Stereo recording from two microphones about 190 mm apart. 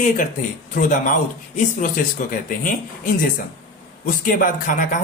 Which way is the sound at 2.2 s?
45° left (ahead or behind).